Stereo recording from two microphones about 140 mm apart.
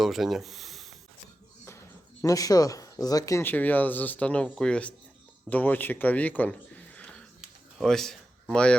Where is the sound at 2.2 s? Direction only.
25° left (ahead or behind).